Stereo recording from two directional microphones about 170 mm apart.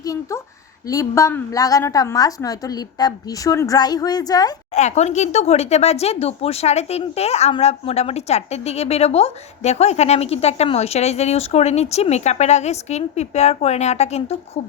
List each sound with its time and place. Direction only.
0.0 s a woman's voice: 20° left (ahead or behind)
4.7 s speech: 45° left (ahead or behind)